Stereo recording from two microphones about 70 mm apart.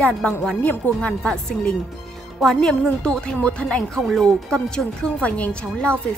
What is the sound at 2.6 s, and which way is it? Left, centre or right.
Speech, centre.